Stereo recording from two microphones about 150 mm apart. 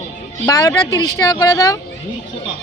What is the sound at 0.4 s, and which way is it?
Speech, 20° left (ahead or behind).